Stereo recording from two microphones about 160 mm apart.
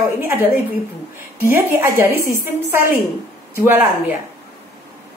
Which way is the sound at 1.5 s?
15° right (ahead or behind).